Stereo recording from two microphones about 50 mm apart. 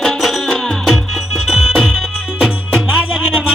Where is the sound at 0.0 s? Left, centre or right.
Centre.